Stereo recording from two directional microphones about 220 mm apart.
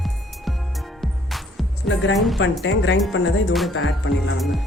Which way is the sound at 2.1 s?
Centre (ahead or behind).